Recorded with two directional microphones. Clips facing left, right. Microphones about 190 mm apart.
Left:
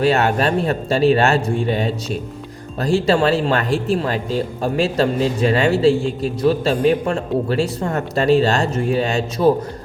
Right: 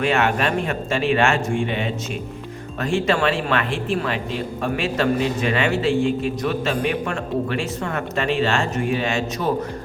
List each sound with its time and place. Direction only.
0.0 s speech: 35° left (ahead or behind)